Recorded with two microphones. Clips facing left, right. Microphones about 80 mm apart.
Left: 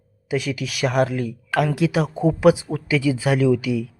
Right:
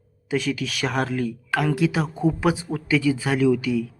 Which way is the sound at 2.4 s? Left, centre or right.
Right.